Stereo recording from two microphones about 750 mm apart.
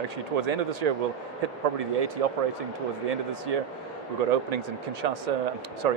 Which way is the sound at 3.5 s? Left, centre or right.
Right.